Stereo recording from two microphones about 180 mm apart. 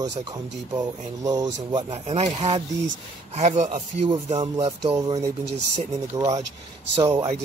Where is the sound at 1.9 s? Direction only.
35° right (ahead or behind).